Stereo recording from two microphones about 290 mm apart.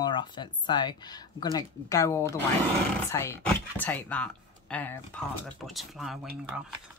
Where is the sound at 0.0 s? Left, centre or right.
Centre.